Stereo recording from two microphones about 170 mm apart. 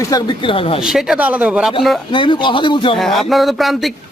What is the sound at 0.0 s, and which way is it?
Speech, 20° left (ahead or behind).